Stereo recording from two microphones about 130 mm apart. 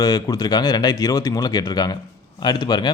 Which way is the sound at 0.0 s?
30° left (ahead or behind).